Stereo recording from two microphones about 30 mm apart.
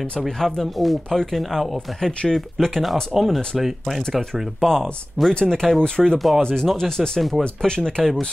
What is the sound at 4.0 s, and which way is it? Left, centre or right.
Speech, left.